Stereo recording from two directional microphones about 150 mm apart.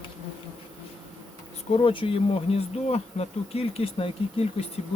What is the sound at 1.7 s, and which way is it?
Speech, 35° left (ahead or behind).